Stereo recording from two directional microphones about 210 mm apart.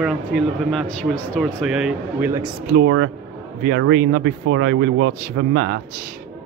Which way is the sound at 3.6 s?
55° right (ahead or behind).